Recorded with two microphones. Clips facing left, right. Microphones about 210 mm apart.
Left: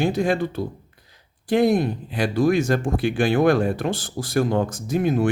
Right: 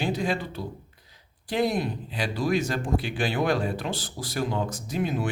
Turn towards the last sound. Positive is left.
turn(degrees=50)  # may be behind; listen again after turning